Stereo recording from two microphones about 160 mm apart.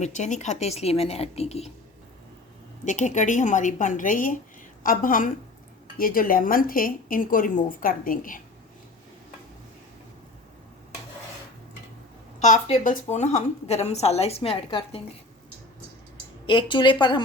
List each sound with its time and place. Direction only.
0.0 s a woman's voice: 50° left (ahead or behind)
2.8 s a woman's voice: 50° left (ahead or behind)
12.4 s a woman's voice: 45° left (ahead or behind)
16.5 s a woman's voice: 30° left (ahead or behind)